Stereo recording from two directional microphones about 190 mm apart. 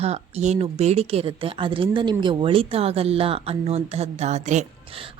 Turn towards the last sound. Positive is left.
turn(degrees=-35)  # may be behind; listen again after turning